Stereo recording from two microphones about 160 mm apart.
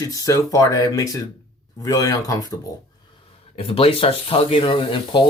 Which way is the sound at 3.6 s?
35° left (ahead or behind).